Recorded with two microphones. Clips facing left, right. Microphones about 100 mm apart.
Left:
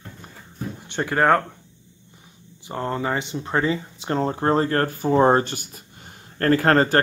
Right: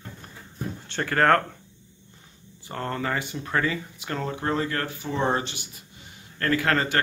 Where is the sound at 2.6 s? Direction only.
15° left (ahead or behind).